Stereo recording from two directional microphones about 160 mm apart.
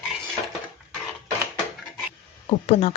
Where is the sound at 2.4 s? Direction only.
40° left (ahead or behind).